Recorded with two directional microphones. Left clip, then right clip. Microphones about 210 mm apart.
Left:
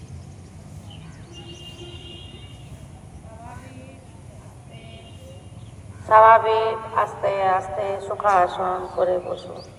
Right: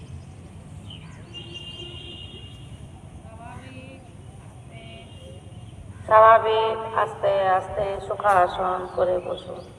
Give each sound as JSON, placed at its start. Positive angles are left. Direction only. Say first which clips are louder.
{"t": 6.1, "sound": "music", "louder": "left 2 dB", "side_deg": -35}